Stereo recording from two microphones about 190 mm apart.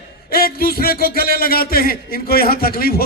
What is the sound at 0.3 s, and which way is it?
A man's voice, 50° left (ahead or behind).